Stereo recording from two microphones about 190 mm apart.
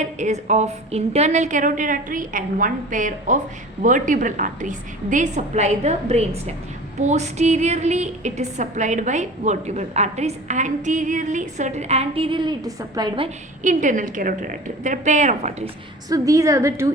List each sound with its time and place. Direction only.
0.0 s a woman's voice: 40° right (ahead or behind)
13.6 s a woman's voice: 40° right (ahead or behind)
16.0 s a woman's voice: 15° right (ahead or behind)